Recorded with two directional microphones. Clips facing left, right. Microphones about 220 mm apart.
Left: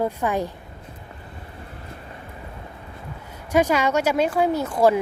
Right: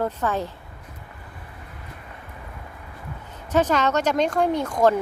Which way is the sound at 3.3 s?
10° left (ahead or behind).